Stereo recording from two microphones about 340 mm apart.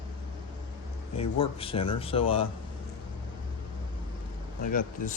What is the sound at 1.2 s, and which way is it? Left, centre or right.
Speech, centre.